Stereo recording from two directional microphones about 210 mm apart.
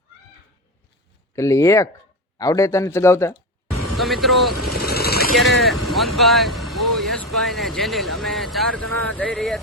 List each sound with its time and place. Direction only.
1.4 s speech: 15° left (ahead or behind)
3.9 s speech: centre (ahead or behind)
4.8 s vehicle: 45° left (ahead or behind)
5.4 s speech: centre (ahead or behind)